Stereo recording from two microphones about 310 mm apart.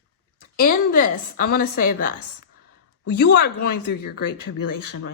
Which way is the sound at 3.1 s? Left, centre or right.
Left.